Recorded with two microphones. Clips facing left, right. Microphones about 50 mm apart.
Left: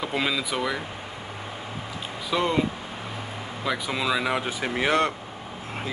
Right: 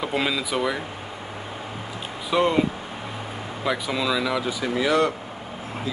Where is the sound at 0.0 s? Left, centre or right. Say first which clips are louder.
Right 2 dB; centre.